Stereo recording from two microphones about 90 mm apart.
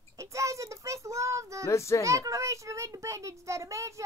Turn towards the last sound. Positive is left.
turn(degrees=-35)  # may be behind; listen again after turning